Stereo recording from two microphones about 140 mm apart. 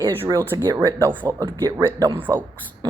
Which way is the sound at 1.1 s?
15° right (ahead or behind).